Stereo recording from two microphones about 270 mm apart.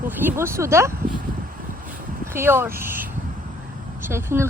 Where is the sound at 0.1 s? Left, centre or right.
Centre.